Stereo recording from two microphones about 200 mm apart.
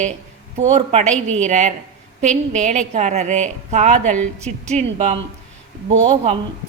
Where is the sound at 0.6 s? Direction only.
35° right (ahead or behind).